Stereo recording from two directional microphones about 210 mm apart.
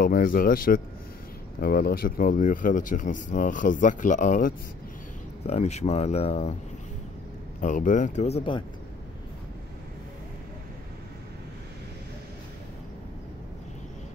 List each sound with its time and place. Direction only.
0.0 s speech: 40° left (ahead or behind)
7.6 s speech: 35° left (ahead or behind)